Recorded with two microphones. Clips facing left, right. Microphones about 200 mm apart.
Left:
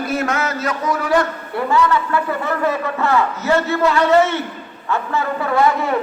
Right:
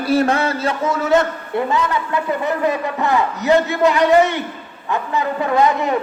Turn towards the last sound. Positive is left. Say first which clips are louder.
# right 1 dB
turn(degrees=-20)  # may be behind; listen again after turning